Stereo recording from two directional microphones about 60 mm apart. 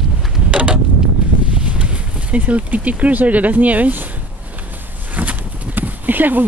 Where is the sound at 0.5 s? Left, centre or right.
Right.